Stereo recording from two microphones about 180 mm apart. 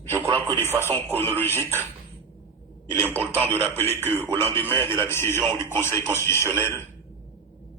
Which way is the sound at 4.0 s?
10° right (ahead or behind).